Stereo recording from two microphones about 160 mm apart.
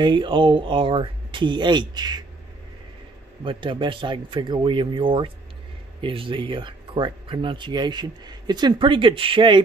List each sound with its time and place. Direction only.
0.0 s speech: 30° right (ahead or behind)
3.4 s speech: 30° right (ahead or behind)